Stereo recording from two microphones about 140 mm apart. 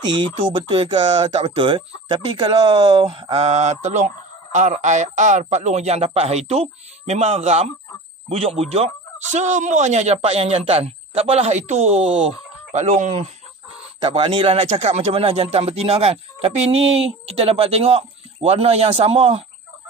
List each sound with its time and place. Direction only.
0.0 s speech: 35° right (ahead or behind)
9.3 s speech: 60° right (ahead or behind)
14.0 s speech: 40° right (ahead or behind)
14.7 s speech: 55° right (ahead or behind)